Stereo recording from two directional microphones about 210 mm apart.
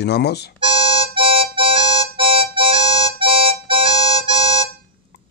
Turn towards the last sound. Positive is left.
turn(degrees=-25)  # may be behind; listen again after turning